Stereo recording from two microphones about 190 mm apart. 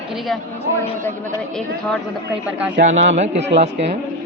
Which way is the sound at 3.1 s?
35° right (ahead or behind).